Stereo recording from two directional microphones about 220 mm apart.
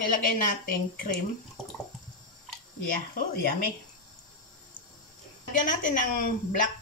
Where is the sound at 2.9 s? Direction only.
40° left (ahead or behind).